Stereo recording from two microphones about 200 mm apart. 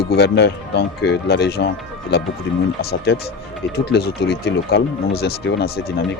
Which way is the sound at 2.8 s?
50° left (ahead or behind).